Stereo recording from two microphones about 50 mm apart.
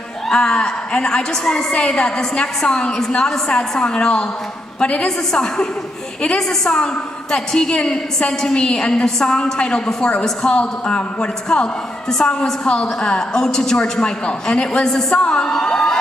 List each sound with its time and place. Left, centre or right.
0.3 s a woman's voice: centre